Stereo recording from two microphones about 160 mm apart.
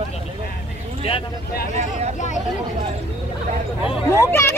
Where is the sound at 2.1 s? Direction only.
50° left (ahead or behind).